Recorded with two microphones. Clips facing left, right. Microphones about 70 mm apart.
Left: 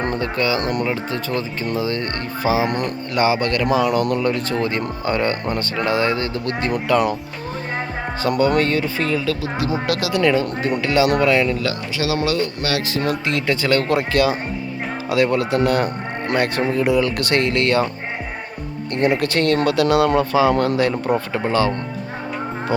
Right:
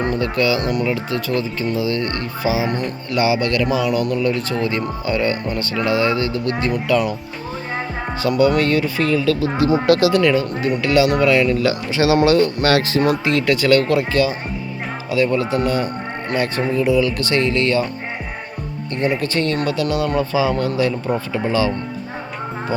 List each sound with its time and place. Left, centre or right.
0.2 s speech: left
0.9 s speech: left
1.6 s speech: left
4.2 s speech: left
8.2 s speech: left
9.4 s speech: centre
10.2 s speech: left
11.9 s speech: right
12.3 s speech: right
13.5 s speech: left
14.1 s speech: left
18.9 s speech: left
21.1 s speech: left